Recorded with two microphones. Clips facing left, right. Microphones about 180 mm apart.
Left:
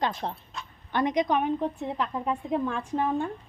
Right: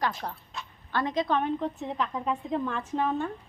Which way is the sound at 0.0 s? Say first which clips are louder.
Left 2 dB; 25° left (ahead or behind).